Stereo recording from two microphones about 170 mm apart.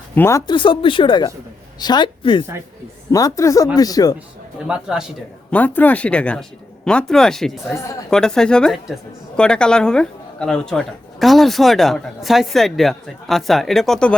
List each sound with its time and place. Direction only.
0.1 s speech: 15° left (ahead or behind)
0.5 s speech: 30° left (ahead or behind)
4.6 s a woman's voice: 5° right (ahead or behind)
5.5 s a woman's voice: 10° left (ahead or behind)